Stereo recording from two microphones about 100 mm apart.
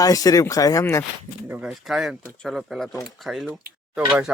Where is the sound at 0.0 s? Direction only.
35° left (ahead or behind).